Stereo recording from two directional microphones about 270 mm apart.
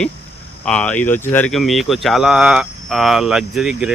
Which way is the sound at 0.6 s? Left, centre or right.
Centre.